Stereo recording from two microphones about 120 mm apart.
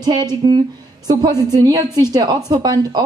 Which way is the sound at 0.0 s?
35° right (ahead or behind).